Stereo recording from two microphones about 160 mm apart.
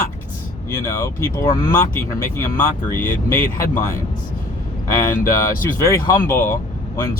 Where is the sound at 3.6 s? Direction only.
15° left (ahead or behind).